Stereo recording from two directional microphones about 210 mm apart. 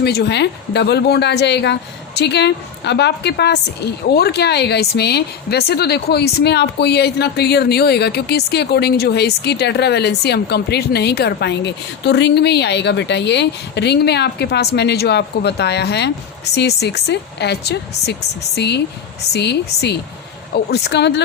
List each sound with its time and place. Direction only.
0.0 s a woman's voice: 50° left (ahead or behind)